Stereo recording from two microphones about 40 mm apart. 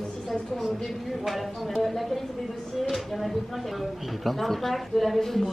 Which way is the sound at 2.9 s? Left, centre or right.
Centre.